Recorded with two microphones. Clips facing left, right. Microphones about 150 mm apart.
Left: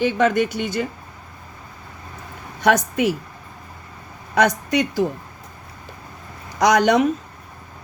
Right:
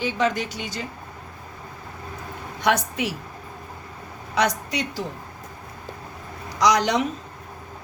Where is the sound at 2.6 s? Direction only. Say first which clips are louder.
Left 5 dB; 45° left (ahead or behind).